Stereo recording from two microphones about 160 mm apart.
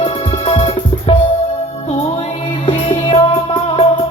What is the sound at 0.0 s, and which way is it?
Music, 30° left (ahead or behind).